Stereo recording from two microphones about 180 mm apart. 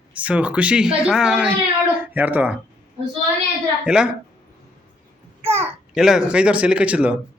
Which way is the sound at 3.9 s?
5° right (ahead or behind).